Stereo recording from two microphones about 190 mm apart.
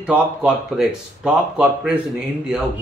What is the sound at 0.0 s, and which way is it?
A man's voice, 5° right (ahead or behind).